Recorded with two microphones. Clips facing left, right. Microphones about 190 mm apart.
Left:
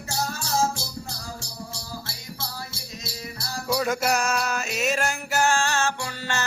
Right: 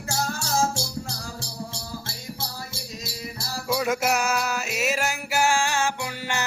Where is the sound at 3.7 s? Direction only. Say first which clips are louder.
Even; centre (ahead or behind).